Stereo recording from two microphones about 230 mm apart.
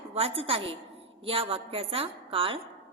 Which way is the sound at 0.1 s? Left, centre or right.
Right.